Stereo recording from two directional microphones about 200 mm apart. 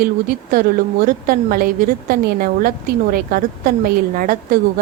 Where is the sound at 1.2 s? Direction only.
45° right (ahead or behind).